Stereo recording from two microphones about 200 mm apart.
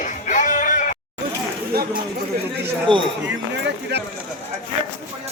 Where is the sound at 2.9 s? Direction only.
25° right (ahead or behind).